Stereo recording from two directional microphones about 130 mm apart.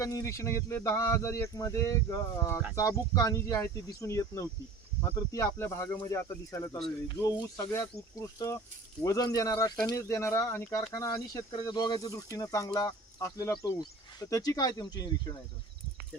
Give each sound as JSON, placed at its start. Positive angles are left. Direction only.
{"t": 0.0, "sound": "speech", "side_deg": 25}